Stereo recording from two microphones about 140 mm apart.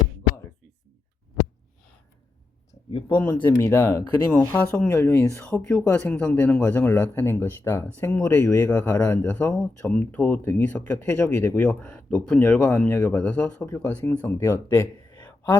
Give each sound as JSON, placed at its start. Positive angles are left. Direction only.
{"t": 2.9, "sound": "speech", "side_deg": 35}
{"t": 3.4, "sound": "speech", "side_deg": 15}
{"t": 5.6, "sound": "speech", "side_deg": 5}